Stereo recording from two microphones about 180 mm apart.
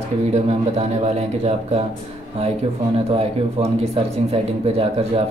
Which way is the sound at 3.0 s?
35° right (ahead or behind).